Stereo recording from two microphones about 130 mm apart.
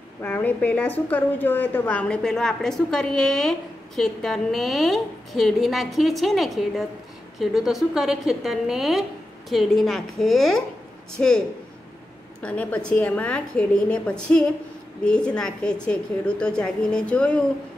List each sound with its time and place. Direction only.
0.2 s a woman's voice: 10° left (ahead or behind)